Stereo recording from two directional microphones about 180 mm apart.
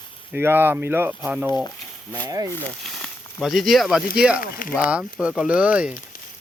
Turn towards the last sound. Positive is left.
turn(degrees=-5)  # may be behind; listen again after turning